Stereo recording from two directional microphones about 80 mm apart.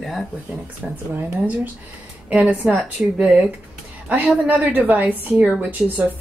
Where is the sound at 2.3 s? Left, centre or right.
Centre.